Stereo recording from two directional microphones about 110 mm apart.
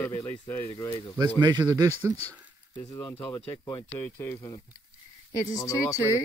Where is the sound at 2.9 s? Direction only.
30° left (ahead or behind).